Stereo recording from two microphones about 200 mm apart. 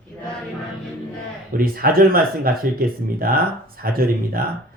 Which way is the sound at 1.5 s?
50° right (ahead or behind).